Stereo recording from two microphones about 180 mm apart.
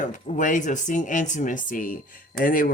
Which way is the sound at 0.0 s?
45° left (ahead or behind).